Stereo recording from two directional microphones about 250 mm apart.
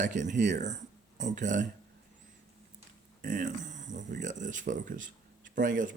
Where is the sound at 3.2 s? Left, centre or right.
Right.